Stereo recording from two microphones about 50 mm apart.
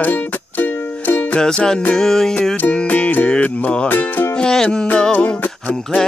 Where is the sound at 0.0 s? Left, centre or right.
Left.